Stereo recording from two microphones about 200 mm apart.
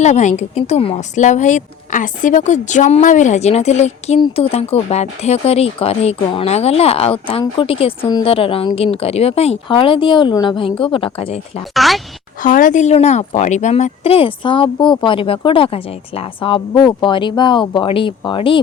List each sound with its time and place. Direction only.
0.0 s a woman's voice: 35° left (ahead or behind)
11.7 s speech: centre (ahead or behind)
12.4 s speech: 45° left (ahead or behind); by 18.6 s 25° left (ahead or behind)